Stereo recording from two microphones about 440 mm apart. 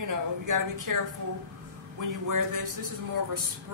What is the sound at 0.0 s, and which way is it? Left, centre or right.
Speech, right.